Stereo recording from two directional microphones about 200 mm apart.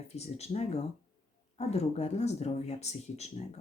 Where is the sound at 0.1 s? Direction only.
30° left (ahead or behind).